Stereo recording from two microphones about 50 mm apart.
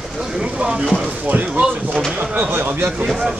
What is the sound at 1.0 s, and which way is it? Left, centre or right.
Speech, right.